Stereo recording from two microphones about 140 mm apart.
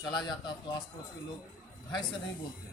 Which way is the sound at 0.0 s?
30° left (ahead or behind).